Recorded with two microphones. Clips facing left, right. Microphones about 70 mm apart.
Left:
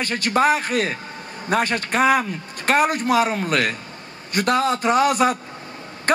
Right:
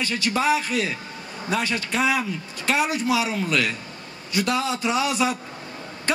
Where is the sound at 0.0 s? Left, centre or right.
Left.